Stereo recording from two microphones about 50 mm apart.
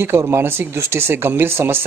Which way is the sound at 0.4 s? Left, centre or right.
Right.